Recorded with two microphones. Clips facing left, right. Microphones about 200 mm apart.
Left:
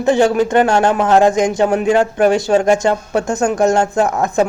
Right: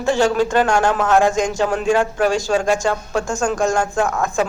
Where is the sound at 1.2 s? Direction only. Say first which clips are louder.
Left 5 dB; 20° left (ahead or behind).